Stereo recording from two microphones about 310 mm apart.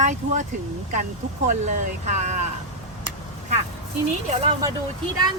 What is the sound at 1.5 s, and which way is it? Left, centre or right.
Speech, right.